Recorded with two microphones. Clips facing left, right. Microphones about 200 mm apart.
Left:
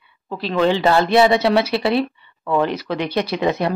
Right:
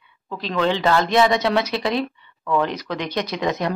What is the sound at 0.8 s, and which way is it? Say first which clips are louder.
Speech: left 2 dB; 30° left (ahead or behind).